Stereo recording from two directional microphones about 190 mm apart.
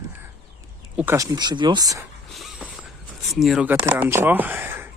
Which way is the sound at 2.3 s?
Centre (ahead or behind).